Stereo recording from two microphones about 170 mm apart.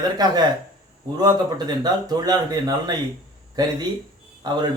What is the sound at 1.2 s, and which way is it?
A man's voice, 25° right (ahead or behind).